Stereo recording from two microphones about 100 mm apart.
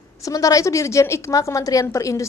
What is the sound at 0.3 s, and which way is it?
A woman's voice, 35° left (ahead or behind).